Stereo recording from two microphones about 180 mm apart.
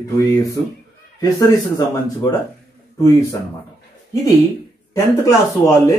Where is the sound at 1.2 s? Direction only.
20° left (ahead or behind).